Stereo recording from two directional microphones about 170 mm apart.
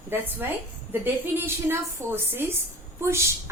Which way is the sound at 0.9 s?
15° right (ahead or behind).